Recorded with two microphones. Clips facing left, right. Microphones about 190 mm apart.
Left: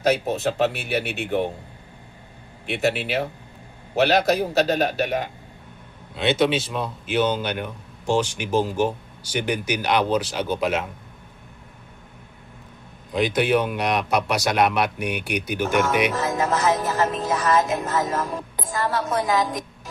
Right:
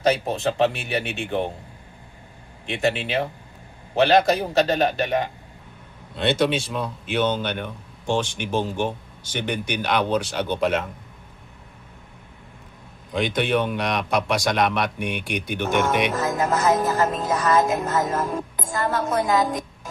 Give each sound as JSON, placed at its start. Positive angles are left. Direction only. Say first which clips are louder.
{"t": 0.0, "sound": "a man's voice", "louder": "even", "side_deg": 5}
{"t": 2.6, "sound": "a man's voice", "louder": "even", "side_deg": 5}
{"t": 6.1, "sound": "a man's voice", "louder": "left 1 dB", "side_deg": 5}
{"t": 13.1, "sound": "a man's voice", "louder": "left 2 dB", "side_deg": 5}
{"t": 16.1, "sound": "speech", "louder": "even", "side_deg": -45}